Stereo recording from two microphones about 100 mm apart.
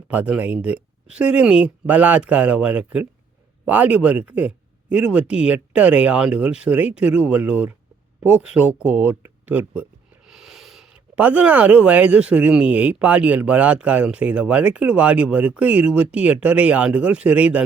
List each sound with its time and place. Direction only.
0.1 s speech: 15° right (ahead or behind)
10.2 s speech: 5° right (ahead or behind)